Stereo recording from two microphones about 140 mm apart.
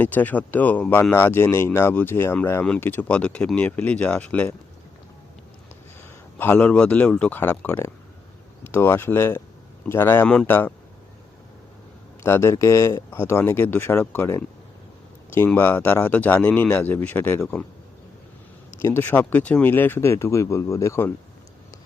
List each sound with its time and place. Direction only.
0.0 s speech: 10° left (ahead or behind)
6.0 s a man's voice: 15° left (ahead or behind)
12.2 s speech: 20° left (ahead or behind)
18.8 s speech: 15° left (ahead or behind)